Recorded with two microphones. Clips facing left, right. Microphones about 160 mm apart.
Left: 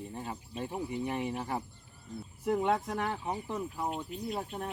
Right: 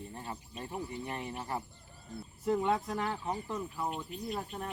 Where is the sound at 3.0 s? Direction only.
10° left (ahead or behind).